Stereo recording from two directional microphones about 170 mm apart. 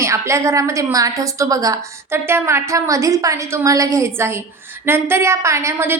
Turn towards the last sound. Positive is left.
turn(degrees=-15)  # may be behind; listen again after turning